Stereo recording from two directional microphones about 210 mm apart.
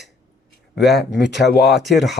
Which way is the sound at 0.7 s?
50° left (ahead or behind).